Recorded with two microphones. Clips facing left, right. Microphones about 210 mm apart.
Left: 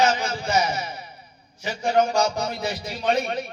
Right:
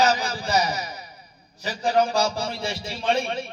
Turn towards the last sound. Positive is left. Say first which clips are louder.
# left 1 dB
turn(degrees=-30)  # may be behind; listen again after turning